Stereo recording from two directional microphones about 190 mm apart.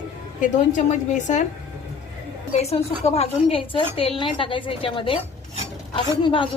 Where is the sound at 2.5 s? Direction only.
35° left (ahead or behind).